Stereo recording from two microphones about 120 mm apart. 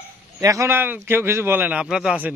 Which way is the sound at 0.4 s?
25° right (ahead or behind).